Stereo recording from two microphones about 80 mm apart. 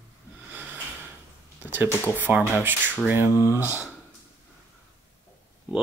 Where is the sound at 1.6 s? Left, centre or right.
Right.